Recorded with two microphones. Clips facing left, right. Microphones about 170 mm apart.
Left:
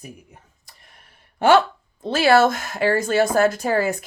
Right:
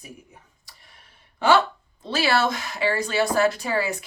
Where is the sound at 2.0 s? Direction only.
50° left (ahead or behind).